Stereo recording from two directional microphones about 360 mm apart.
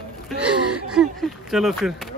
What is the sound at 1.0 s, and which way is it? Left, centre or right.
Speech, centre.